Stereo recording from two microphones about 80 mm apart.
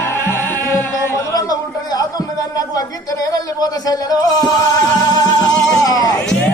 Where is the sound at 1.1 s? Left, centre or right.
Left.